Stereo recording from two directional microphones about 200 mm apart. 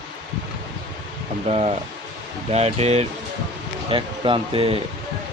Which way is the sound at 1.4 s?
30° right (ahead or behind).